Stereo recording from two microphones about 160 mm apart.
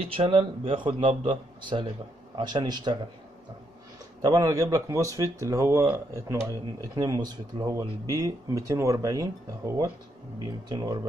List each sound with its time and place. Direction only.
0.1 s a man's voice: 35° right (ahead or behind)
4.2 s speech: 20° right (ahead or behind)